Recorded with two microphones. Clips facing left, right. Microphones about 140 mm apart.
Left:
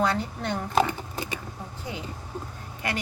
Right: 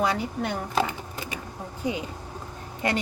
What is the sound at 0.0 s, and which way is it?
Speech, 10° right (ahead or behind).